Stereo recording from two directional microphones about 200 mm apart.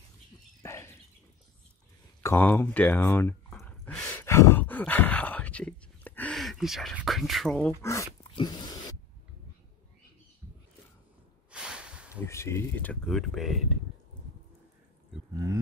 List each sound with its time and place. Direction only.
0.6 s dog: 15° left (ahead or behind)
2.2 s speech: 10° left (ahead or behind)
3.5 s a sound: 5° left (ahead or behind)
7.8 s dog: 15° left (ahead or behind)
11.5 s a sound: 5° right (ahead or behind)
12.3 s speech: 15° left (ahead or behind)
15.3 s a man's voice: 15° right (ahead or behind)